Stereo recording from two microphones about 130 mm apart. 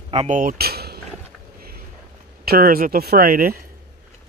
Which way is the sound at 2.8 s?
90° right.